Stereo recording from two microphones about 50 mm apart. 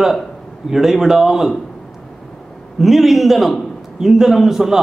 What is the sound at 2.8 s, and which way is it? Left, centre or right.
A man's voice, centre.